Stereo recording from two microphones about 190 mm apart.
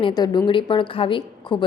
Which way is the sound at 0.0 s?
20° left (ahead or behind).